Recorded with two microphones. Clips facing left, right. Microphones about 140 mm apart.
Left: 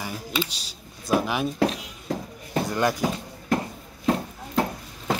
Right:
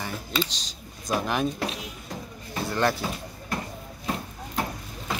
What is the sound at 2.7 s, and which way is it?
Speech, 15° left (ahead or behind).